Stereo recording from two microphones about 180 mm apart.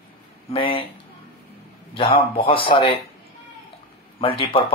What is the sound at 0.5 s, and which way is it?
Speech, 30° left (ahead or behind).